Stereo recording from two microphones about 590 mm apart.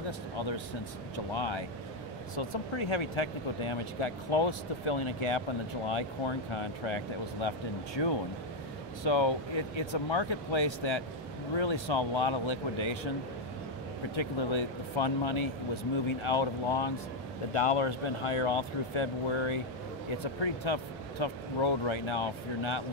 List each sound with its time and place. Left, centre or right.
1.1 s speech: left
14.1 s speech: left